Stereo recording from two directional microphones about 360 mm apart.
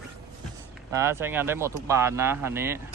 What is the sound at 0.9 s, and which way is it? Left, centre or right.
Speech, centre.